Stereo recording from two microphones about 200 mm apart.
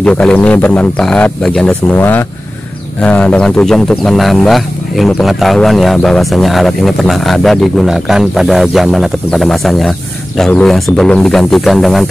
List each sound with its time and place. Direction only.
0.0 s speech: 5° left (ahead or behind)